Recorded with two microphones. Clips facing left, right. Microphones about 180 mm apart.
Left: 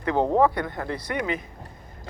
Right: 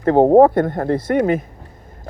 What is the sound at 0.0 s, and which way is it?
Speech, 50° right (ahead or behind).